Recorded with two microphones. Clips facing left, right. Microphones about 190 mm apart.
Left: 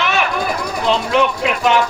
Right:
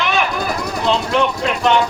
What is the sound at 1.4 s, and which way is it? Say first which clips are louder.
Speech: even; 5° left (ahead or behind).